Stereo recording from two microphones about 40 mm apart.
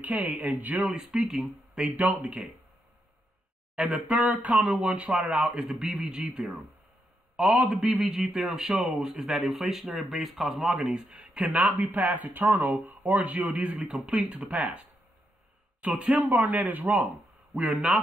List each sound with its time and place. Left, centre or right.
0.0 s speech: right
0.7 s speech: centre
1.1 s speech: centre
1.9 s speech: right
3.7 s speech: right
5.7 s speech: centre
6.0 s a man's voice: right
7.8 s speech: centre
10.8 s speech: centre
11.3 s speech: right
16.3 s speech: right